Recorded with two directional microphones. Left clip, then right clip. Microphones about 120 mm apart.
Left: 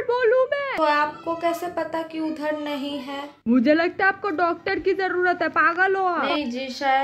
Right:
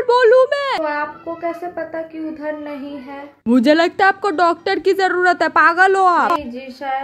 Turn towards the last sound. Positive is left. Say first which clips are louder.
# left 2 dB
turn(degrees=10)  # may be behind; listen again after turning